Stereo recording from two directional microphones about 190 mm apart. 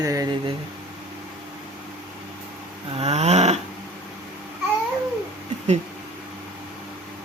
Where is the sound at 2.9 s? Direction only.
35° right (ahead or behind).